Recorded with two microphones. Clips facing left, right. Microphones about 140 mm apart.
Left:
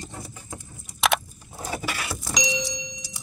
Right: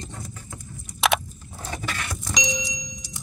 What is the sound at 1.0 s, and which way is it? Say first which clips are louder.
Car: right 1 dB; 5° left (ahead or behind).